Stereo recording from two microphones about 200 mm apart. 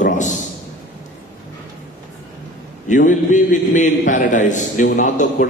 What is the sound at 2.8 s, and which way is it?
A man's voice, 40° left (ahead or behind).